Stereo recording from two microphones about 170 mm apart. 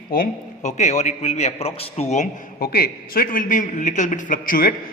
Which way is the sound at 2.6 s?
65° left (ahead or behind).